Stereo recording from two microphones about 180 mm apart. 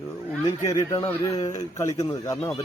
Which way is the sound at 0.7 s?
20° left (ahead or behind).